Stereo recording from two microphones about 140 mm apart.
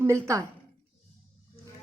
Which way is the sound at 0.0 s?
20° right (ahead or behind).